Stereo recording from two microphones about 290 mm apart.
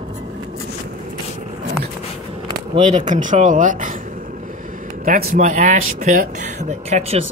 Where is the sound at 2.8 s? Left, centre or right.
Right.